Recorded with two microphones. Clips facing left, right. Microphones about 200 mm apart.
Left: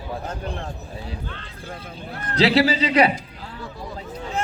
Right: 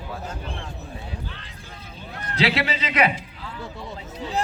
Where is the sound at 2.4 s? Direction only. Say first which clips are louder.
Left 6 dB; 30° left (ahead or behind).